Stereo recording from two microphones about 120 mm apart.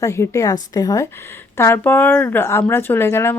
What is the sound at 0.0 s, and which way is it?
Speech, 25° left (ahead or behind).